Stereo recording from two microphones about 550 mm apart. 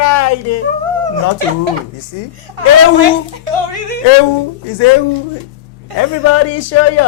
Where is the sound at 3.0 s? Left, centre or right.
Right.